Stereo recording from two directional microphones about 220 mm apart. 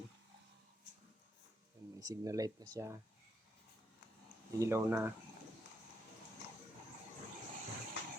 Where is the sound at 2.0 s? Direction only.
15° right (ahead or behind).